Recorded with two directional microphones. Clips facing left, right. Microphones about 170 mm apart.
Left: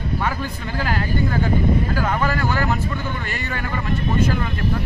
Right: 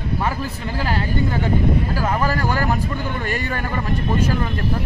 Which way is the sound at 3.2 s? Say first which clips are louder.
Right 4 dB; 45° right (ahead or behind).